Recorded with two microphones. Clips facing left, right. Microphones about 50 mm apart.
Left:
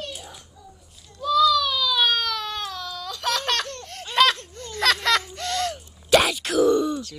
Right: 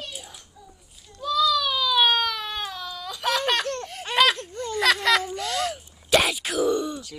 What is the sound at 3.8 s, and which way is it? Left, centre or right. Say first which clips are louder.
Laughter: right 2 dB; centre.